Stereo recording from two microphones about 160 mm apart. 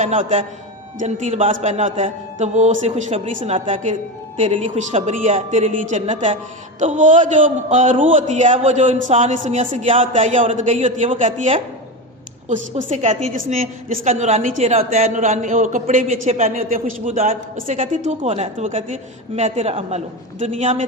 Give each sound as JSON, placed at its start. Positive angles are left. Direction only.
{"t": 0.0, "sound": "a man's voice", "side_deg": -50}
{"t": 10.2, "sound": "a man's voice", "side_deg": -50}
{"t": 12.5, "sound": "a man's voice", "side_deg": -45}
{"t": 13.3, "sound": "a man's voice", "side_deg": -55}